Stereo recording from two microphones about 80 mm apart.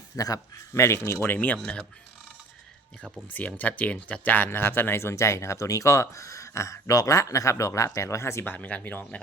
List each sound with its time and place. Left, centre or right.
0.2 s speech: left
1.6 s speech: centre
3.6 s speech: centre; by 8.5 s left
8.5 s speech: centre